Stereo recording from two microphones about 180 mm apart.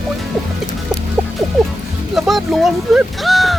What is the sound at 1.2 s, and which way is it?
Music, 5° right (ahead or behind).